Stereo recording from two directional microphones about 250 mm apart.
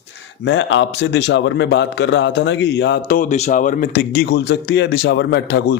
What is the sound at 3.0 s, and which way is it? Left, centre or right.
A man's voice, left.